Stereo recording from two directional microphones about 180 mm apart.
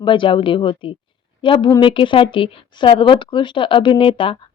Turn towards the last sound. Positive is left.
turn(degrees=30)  # may be behind; listen again after turning